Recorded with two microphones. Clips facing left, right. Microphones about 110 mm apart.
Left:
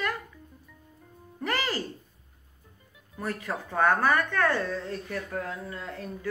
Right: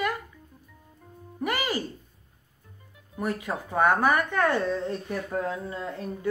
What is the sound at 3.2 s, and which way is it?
Speech, 15° right (ahead or behind).